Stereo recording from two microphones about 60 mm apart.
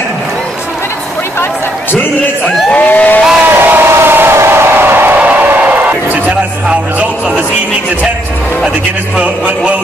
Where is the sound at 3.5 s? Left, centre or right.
Right.